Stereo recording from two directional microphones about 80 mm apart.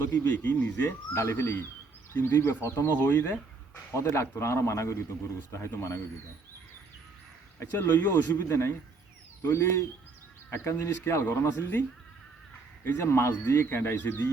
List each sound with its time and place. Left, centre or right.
0.1 s speech: left
7.6 s speech: left